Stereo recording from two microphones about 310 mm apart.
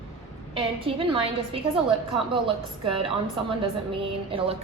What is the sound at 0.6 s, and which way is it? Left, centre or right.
A woman's voice, centre.